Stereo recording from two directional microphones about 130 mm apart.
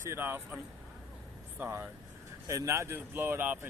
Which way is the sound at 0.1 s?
15° right (ahead or behind).